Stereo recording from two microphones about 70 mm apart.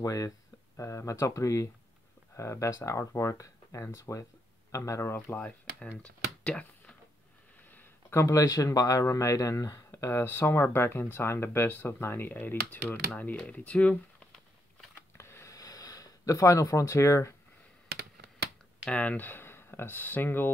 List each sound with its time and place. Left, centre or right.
0.0 s speech: left
0.7 s speech: left
5.1 s speech: left
8.1 s speech: left
8.4 s speech: left; by 13.9 s centre
15.1 s a sound: left
15.5 s a sound: left
18.9 s speech: centre